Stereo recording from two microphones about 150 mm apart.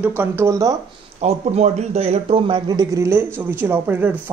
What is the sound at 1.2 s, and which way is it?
A man's voice, 45° right (ahead or behind).